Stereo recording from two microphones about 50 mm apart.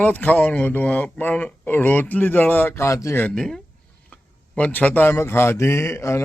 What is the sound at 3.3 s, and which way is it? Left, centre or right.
Speech, centre.